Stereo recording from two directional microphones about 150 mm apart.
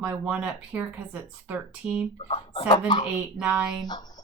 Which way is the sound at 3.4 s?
10° right (ahead or behind).